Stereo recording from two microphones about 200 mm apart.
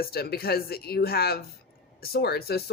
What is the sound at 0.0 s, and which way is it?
Speech, 50° left (ahead or behind).